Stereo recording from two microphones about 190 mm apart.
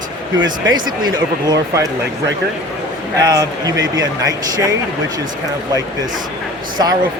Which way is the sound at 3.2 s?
20° right (ahead or behind).